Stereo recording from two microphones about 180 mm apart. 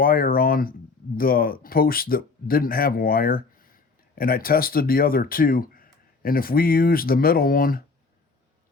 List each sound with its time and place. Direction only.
0.0 s speech: 55° left (ahead or behind)